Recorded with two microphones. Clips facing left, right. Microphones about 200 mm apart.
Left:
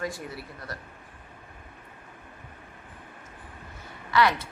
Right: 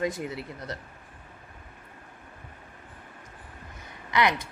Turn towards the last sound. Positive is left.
turn(degrees=-15)  # may be behind; listen again after turning